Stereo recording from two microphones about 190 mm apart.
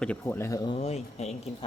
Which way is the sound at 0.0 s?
10° left (ahead or behind).